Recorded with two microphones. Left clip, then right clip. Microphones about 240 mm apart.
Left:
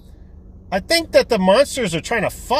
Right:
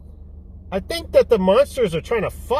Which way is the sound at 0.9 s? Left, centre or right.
Centre.